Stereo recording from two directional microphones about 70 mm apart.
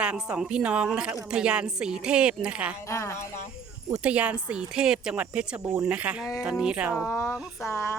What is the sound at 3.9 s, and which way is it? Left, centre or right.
A woman's voice, centre.